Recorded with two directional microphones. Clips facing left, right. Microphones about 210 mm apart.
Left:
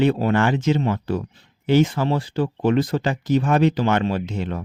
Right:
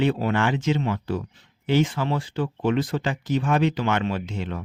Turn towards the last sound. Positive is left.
turn(degrees=40)  # may be behind; listen again after turning